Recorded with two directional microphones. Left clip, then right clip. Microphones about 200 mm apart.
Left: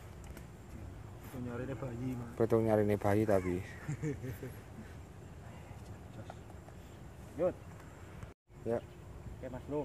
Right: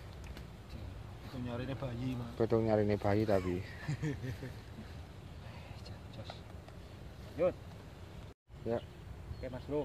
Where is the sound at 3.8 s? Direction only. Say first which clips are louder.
Even; 40° right (ahead or behind).